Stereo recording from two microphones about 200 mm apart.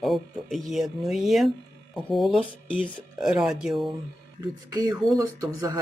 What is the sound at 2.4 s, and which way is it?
Speech, 25° left (ahead or behind).